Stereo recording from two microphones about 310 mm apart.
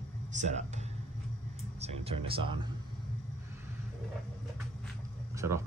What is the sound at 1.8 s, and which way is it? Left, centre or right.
Speech, centre.